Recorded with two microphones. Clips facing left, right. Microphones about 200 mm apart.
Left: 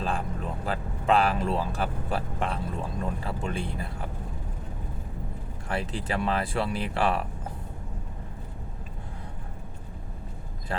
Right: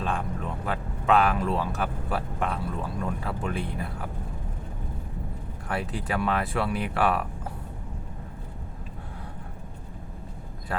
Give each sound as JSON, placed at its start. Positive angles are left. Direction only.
{"t": 0.0, "sound": "speech", "side_deg": 35}
{"t": 5.8, "sound": "speech", "side_deg": -5}
{"t": 6.1, "sound": "speech", "side_deg": 30}